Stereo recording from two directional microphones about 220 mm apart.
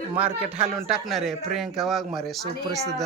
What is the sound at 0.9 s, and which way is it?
A man's voice, centre (ahead or behind).